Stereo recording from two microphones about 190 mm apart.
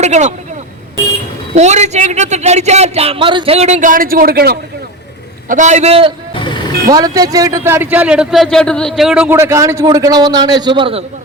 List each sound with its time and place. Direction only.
0.0 s a man's voice: 35° right (ahead or behind)
1.5 s a man's voice: 35° right (ahead or behind); by 4.5 s 55° right (ahead or behind)
5.5 s a man's voice: 40° right (ahead or behind)
6.9 s a man's voice: 20° right (ahead or behind)